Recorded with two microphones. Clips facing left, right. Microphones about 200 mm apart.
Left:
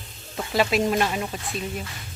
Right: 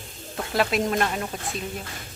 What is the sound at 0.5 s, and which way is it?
Speech, centre (ahead or behind).